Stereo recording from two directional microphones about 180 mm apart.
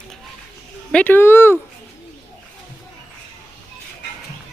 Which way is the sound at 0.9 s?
10° left (ahead or behind).